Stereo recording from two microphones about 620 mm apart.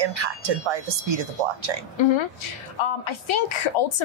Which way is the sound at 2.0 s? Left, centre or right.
Left.